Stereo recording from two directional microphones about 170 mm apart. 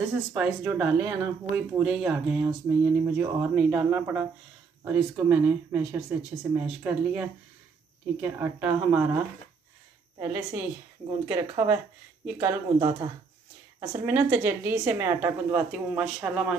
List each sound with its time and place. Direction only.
0.3 s a woman's voice: 5° right (ahead or behind)
12.4 s speech: 25° right (ahead or behind)
13.7 s a woman's voice: 10° right (ahead or behind)